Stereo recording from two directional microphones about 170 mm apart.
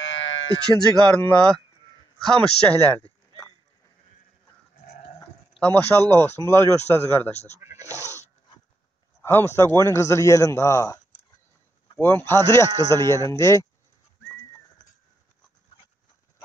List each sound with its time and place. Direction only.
0.0 s a sound: 90° left
1.0 s speech: 5° left (ahead or behind)
5.6 s speech: 10° left (ahead or behind)
7.3 s speech: 40° left (ahead or behind)
7.9 s goat: 15° left (ahead or behind)
9.2 s speech: 15° left (ahead or behind)
12.0 s speech: 10° left (ahead or behind)